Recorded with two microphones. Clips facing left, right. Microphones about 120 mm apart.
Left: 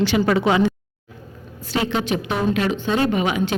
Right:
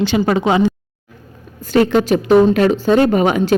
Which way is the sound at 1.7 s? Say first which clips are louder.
Right 9 dB; 45° right (ahead or behind).